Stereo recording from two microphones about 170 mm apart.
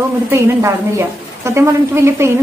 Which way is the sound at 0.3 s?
15° right (ahead or behind).